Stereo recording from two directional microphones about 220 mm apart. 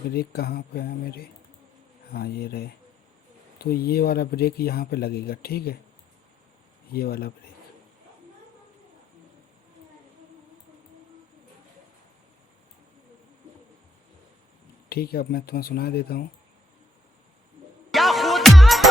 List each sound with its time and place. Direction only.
0.1 s speech: 45° left (ahead or behind)
6.9 s speech: 45° left (ahead or behind)
14.8 s speech: 45° left (ahead or behind)
17.9 s music: centre (ahead or behind)